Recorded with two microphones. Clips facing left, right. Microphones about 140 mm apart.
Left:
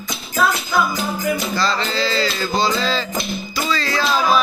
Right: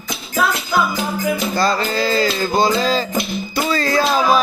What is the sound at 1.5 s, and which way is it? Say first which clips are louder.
Music: right 3 dB; 45° right (ahead or behind).